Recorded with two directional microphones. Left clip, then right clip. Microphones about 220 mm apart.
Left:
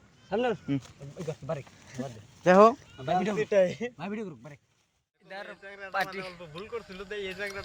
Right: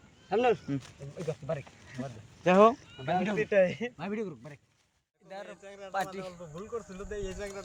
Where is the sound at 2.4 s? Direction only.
30° left (ahead or behind).